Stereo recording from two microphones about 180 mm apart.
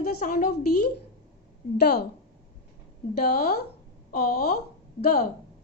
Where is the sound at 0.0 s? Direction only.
55° left (ahead or behind).